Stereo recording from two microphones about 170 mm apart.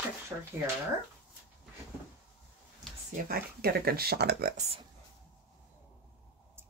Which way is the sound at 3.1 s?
65° right (ahead or behind).